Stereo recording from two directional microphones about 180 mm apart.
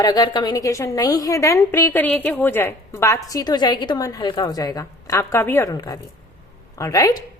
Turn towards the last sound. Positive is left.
turn(degrees=20)  # may be behind; listen again after turning